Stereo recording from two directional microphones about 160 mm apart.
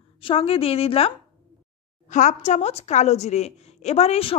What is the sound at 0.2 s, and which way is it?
Speech, 35° left (ahead or behind).